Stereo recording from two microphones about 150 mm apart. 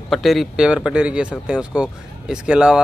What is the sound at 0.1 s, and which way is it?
Speech, centre (ahead or behind).